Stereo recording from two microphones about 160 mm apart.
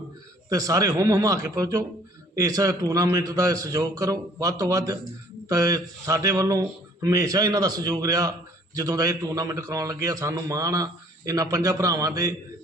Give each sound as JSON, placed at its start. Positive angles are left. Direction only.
{"t": 0.5, "sound": "a man's voice", "side_deg": -20}